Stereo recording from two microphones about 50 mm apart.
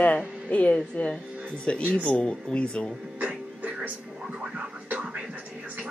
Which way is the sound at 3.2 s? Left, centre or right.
Right.